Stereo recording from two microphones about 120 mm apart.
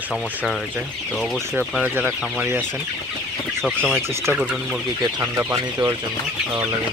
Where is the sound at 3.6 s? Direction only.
Centre (ahead or behind).